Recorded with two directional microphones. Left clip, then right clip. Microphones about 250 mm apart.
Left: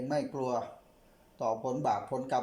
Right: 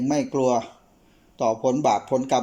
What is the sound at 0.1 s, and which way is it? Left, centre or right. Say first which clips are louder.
Speech: right 11 dB; centre.